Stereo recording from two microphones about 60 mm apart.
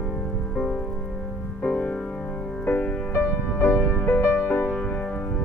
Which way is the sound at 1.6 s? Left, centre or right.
Centre.